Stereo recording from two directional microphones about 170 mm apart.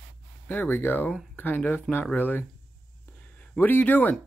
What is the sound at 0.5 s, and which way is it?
Speech, 10° left (ahead or behind).